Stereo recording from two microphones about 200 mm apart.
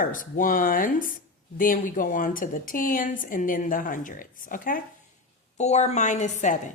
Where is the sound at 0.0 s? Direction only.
40° left (ahead or behind).